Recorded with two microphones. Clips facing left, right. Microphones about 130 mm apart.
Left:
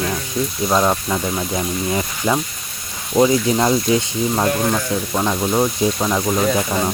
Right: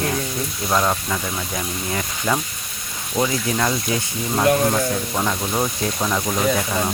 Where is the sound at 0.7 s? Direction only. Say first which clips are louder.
Left 3 dB; 15° left (ahead or behind).